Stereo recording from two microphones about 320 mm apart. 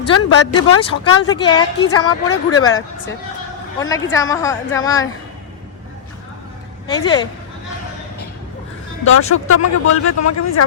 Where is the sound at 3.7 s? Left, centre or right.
Centre.